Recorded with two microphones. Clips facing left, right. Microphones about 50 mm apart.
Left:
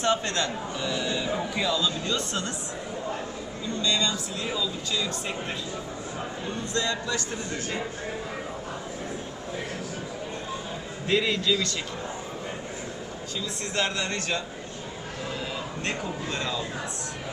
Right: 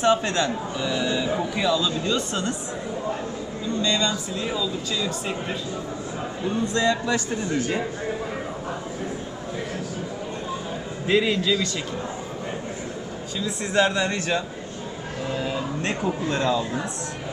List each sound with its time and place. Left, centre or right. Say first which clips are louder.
0.0 s speech: right 5 dB; centre
4.1 s speech: right 3 dB; centre
11.1 s speech: right 3 dB; centre
13.7 s speech: right 7 dB; centre